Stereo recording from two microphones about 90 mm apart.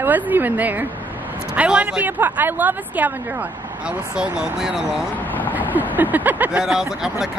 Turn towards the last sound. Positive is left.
turn(degrees=-5)  # may be behind; listen again after turning